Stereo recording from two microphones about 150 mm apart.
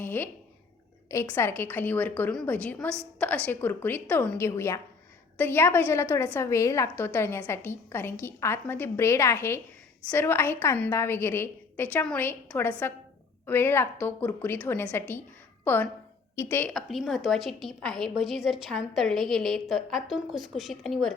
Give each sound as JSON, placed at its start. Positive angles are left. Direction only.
{"t": 0.0, "sound": "a sound", "side_deg": 15}
{"t": 1.0, "sound": "a woman's voice", "side_deg": 20}
{"t": 16.7, "sound": "a woman's voice", "side_deg": 0}